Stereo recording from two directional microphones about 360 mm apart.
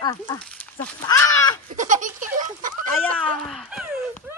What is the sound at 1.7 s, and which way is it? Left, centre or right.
Speech, right.